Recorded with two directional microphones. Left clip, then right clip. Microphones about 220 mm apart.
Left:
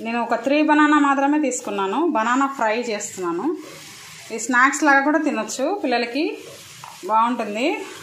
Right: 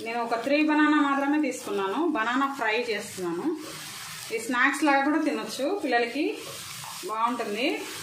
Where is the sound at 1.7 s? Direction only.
20° left (ahead or behind).